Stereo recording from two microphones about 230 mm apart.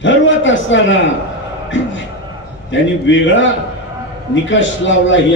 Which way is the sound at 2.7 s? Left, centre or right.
Left.